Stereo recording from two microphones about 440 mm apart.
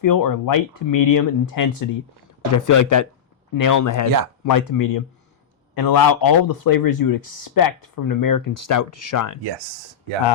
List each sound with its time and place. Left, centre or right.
0.0 s speech: left